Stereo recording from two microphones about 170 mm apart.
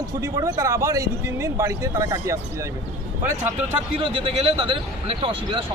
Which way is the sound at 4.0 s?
35° right (ahead or behind).